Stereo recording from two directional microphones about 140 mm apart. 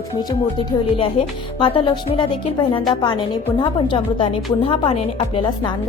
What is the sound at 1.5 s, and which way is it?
A woman's voice, 40° left (ahead or behind).